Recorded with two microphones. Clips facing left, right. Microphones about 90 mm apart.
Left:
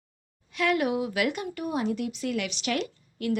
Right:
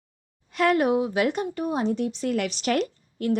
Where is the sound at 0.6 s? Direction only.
40° right (ahead or behind).